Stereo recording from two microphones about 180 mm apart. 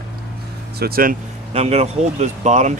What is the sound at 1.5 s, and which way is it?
Speech, 35° right (ahead or behind).